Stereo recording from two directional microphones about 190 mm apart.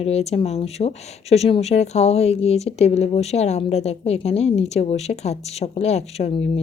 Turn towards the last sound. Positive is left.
turn(degrees=35)  # may be behind; listen again after turning